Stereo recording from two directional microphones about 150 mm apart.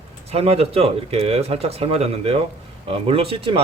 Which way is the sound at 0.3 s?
40° right (ahead or behind).